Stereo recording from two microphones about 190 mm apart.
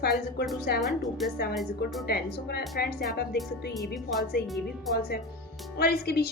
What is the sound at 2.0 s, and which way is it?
Speech, 55° left (ahead or behind).